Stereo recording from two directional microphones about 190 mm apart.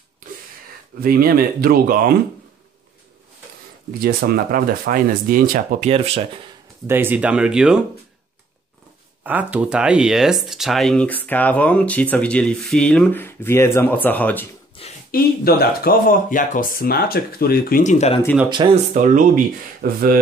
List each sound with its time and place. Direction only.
1.0 s speech: 50° right (ahead or behind)
4.0 s speech: 50° right (ahead or behind)
5.9 s speech: 30° right (ahead or behind)
6.9 s speech: 10° right (ahead or behind)
9.2 s speech: 10° right (ahead or behind); by 14.5 s 10° left (ahead or behind)
15.0 s speech: 50° left (ahead or behind); by 18.2 s 35° left (ahead or behind)
18.6 s speech: 25° right (ahead or behind)
18.9 s speech: 40° right (ahead or behind)